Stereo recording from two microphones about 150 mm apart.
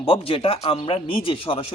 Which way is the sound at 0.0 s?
40° left (ahead or behind).